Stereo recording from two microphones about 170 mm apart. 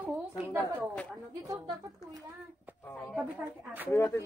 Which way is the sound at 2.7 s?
10° right (ahead or behind).